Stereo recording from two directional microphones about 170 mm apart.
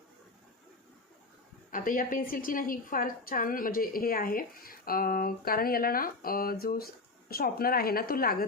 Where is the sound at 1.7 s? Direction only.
55° left (ahead or behind).